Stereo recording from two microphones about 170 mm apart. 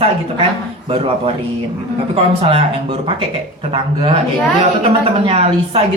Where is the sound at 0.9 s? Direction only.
35° right (ahead or behind).